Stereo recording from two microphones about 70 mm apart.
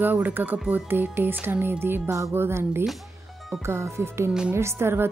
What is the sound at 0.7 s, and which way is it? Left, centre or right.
Music, right.